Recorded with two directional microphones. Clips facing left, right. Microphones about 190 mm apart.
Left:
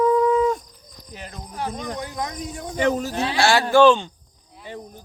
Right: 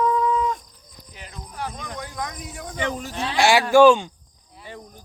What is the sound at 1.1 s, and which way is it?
Cricket, 40° left (ahead or behind).